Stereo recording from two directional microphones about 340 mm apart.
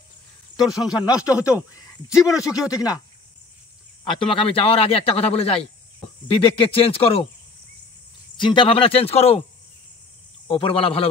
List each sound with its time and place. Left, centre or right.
0.6 s speech: centre
0.8 s a man's voice: centre
2.4 s a man's voice: centre
4.0 s a man's voice: centre
8.4 s a man's voice: centre
10.5 s a man's voice: centre